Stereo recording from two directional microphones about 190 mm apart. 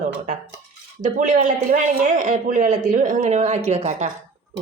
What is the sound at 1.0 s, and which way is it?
Speech, 40° right (ahead or behind).